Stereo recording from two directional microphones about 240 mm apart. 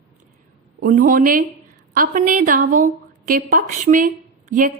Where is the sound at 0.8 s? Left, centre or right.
Right.